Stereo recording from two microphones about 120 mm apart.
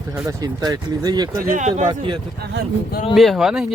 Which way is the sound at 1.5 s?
90° right.